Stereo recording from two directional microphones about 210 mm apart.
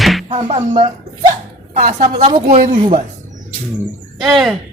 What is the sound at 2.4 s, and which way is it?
Speech, 40° right (ahead or behind).